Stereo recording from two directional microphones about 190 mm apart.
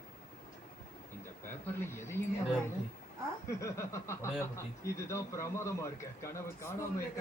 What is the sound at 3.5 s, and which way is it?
A man's voice, 15° left (ahead or behind).